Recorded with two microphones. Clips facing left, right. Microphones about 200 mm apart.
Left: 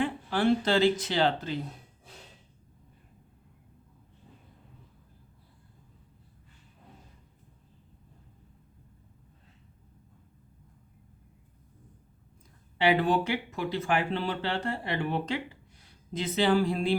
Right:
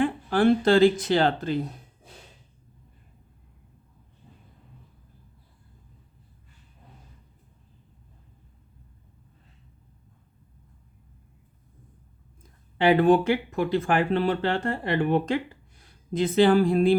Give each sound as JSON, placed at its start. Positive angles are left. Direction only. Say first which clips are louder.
{"t": 0.0, "sound": "speech", "louder": "right 5 dB", "side_deg": -50}
{"t": 12.8, "sound": "speech", "louder": "right 6 dB", "side_deg": -50}